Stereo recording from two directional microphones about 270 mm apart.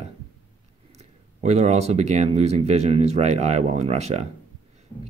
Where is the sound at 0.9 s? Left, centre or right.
Right.